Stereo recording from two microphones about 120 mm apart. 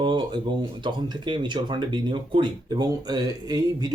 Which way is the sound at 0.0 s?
40° right (ahead or behind).